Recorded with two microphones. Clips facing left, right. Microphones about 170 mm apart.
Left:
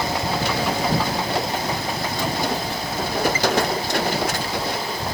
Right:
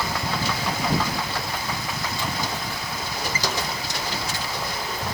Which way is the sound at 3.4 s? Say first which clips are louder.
Left 8 dB; 60° left (ahead or behind).